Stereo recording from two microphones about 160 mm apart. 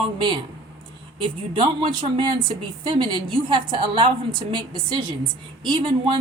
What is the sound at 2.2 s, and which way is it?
Speech, 30° right (ahead or behind).